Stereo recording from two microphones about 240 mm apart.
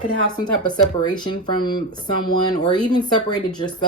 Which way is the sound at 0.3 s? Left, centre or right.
Centre.